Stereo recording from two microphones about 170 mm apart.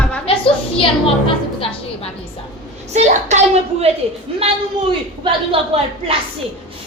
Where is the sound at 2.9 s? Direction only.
40° right (ahead or behind).